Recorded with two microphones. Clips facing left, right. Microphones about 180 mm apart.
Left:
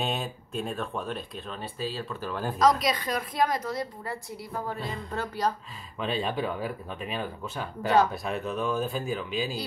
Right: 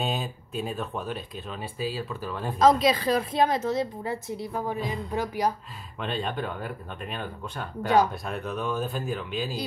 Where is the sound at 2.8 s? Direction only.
30° right (ahead or behind); by 5.5 s 15° right (ahead or behind).